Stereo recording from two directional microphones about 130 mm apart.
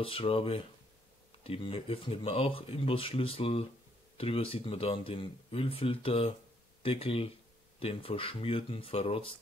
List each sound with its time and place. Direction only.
0.0 s speech: 45° left (ahead or behind)